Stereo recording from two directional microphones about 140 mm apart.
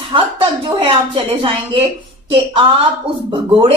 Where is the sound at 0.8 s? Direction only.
40° right (ahead or behind).